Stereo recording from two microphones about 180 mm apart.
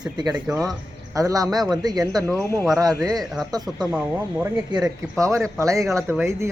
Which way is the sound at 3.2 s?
Centre (ahead or behind).